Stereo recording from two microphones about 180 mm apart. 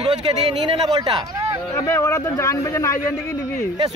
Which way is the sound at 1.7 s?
15° left (ahead or behind).